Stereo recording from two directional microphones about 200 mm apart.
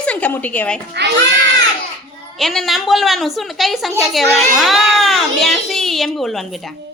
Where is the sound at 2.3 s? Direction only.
Centre (ahead or behind).